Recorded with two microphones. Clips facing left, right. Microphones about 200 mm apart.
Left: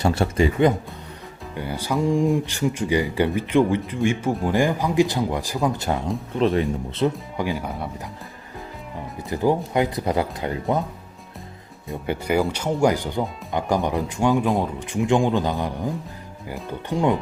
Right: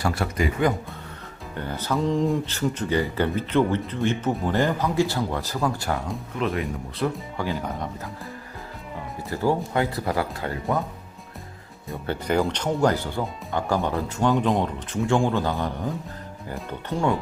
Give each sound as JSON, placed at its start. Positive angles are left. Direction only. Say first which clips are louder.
{"t": 0.0, "sound": "speech", "louder": "left 5 dB", "side_deg": 25}
{"t": 1.5, "sound": "speech", "louder": "left 2 dB", "side_deg": 10}
{"t": 6.3, "sound": "speech", "louder": "left 6 dB", "side_deg": 30}
{"t": 9.3, "sound": "speech", "louder": "left 3 dB", "side_deg": 15}
{"t": 12.0, "sound": "speech", "louder": "left 2 dB", "side_deg": 10}
{"t": 16.9, "sound": "speech", "louder": "left 3 dB", "side_deg": 15}